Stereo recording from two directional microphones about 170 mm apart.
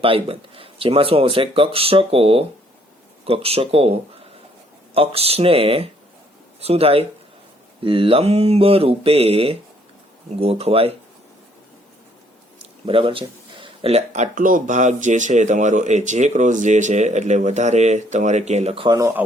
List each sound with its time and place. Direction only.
0.0 s speech: 30° right (ahead or behind)
12.8 s speech: 30° right (ahead or behind)
18.9 s speech: 15° right (ahead or behind)